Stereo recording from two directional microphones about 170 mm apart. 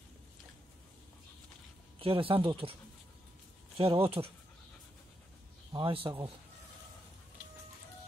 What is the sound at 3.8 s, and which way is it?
Speech, 30° right (ahead or behind).